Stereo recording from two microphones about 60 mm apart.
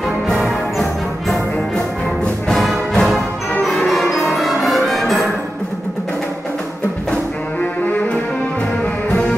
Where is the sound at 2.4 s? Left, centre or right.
Centre.